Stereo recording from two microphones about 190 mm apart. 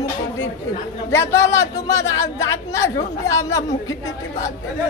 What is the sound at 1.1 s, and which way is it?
A man's voice, 15° left (ahead or behind).